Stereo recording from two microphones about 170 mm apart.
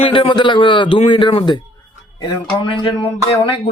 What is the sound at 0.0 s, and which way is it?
Speech, 30° left (ahead or behind).